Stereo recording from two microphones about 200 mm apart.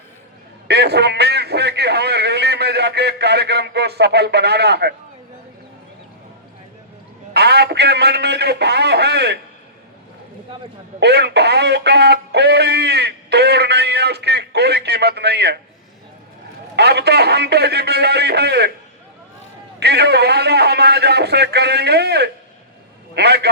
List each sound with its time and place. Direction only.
0.7 s a man's voice: 55° right (ahead or behind)
7.3 s a man's voice: 55° right (ahead or behind)
11.0 s speech: 55° right (ahead or behind)
16.7 s a man's voice: 55° right (ahead or behind)
19.8 s a man's voice: 55° right (ahead or behind)